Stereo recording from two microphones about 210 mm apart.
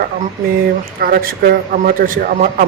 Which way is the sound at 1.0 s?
45° right (ahead or behind).